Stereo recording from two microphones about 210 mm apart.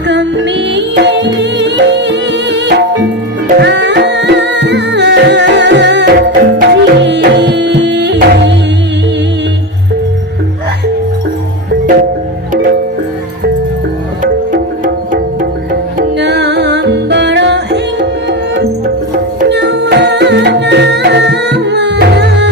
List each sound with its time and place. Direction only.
0.1 s music: 55° right (ahead or behind)
16.1 s music: 55° right (ahead or behind)